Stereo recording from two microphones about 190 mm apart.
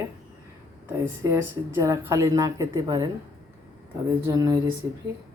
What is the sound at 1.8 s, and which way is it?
Speech, 15° right (ahead or behind).